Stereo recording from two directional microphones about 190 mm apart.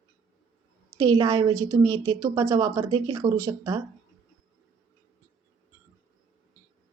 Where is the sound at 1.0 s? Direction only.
20° right (ahead or behind).